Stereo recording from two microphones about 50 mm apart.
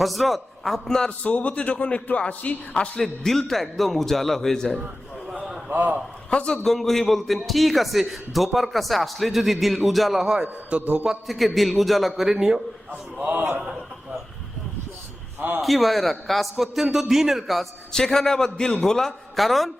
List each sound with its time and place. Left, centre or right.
0.0 s a man's voice: centre
1.2 s a man's voice: left
3.0 s a man's voice: centre
5.3 s a sound: centre
5.7 s a man's voice: right
6.3 s a man's voice: centre
6.6 s a man's voice: centre
10.4 s a man's voice: right
11.3 s a man's voice: centre
12.9 s a man's voice: right
15.4 s a man's voice: right
15.6 s a man's voice: centre